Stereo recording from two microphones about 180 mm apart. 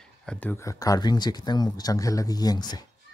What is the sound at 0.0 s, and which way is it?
Speech, 5° left (ahead or behind).